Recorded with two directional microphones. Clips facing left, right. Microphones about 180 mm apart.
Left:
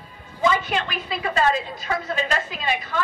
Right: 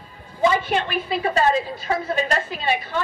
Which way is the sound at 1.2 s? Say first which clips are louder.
Right 1 dB; 30° right (ahead or behind).